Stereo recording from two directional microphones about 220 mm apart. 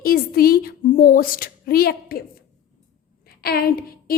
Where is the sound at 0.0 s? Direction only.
40° left (ahead or behind).